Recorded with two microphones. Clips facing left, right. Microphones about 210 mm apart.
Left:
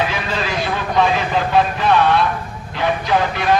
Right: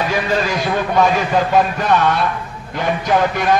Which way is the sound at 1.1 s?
45° right (ahead or behind).